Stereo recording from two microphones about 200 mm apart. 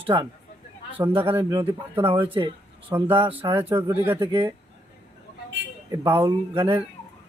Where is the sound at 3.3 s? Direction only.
10° right (ahead or behind).